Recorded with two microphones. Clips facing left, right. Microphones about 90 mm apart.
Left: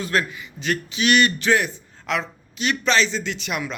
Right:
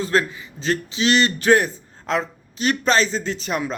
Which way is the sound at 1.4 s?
40° right (ahead or behind).